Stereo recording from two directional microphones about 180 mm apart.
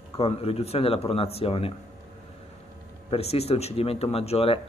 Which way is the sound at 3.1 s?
35° left (ahead or behind).